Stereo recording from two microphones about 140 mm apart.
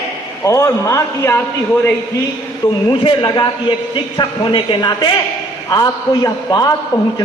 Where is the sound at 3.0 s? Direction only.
35° left (ahead or behind).